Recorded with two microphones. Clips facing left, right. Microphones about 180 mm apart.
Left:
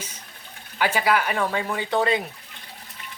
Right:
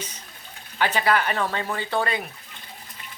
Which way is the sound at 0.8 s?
10° left (ahead or behind).